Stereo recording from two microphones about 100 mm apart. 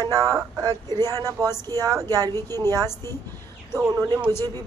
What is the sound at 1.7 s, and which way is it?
Speech, 40° right (ahead or behind).